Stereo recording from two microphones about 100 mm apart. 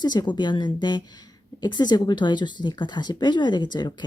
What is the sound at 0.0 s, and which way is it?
A woman's voice, 45° left (ahead or behind).